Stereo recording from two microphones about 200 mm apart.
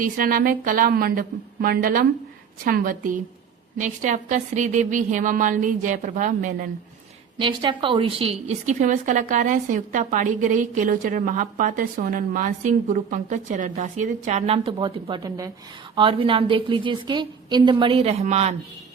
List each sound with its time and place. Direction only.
0.0 s a woman's voice: 45° right (ahead or behind)
7.3 s a woman's voice: 25° right (ahead or behind)